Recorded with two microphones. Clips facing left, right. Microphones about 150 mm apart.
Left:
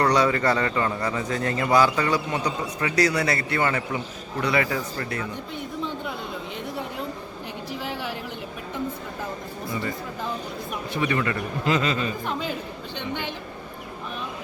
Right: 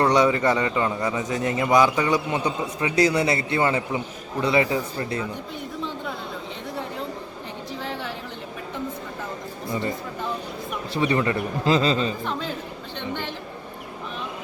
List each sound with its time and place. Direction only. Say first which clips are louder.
0.0 s a man's voice: right 2 dB; 20° right (ahead or behind)
7.8 s a sound: even; 5° left (ahead or behind)
10.9 s a man's voice: right 3 dB; 30° right (ahead or behind)
12.2 s a man's voice: even; 5° left (ahead or behind)